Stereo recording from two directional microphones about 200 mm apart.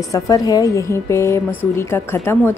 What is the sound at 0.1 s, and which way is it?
A woman's voice, 15° left (ahead or behind).